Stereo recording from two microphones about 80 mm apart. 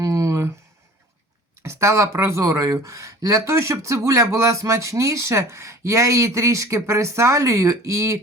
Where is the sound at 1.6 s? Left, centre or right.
Right.